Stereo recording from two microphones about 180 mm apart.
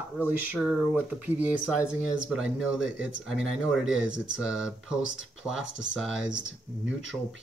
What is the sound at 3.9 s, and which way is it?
Speech, 5° right (ahead or behind).